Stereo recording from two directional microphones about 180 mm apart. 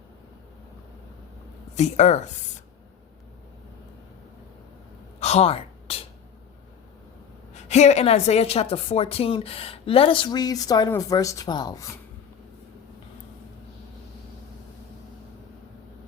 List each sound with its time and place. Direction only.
1.7 s a woman's voice: 40° left (ahead or behind)
5.2 s a sound: 35° left (ahead or behind)
7.5 s a woman's voice: 40° left (ahead or behind); by 11.9 s 20° left (ahead or behind)